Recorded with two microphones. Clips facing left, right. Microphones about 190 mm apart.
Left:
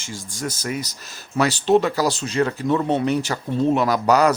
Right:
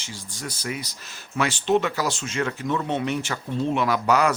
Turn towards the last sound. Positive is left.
turn(degrees=40)  # may be behind; listen again after turning